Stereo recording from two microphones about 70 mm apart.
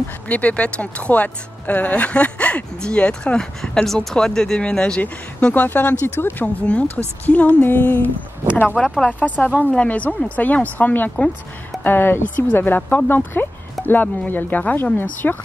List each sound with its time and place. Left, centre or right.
0.3 s speech: centre
5.5 s speech: left
6.4 s speech: centre
8.7 s speech: centre
9.0 s speech: left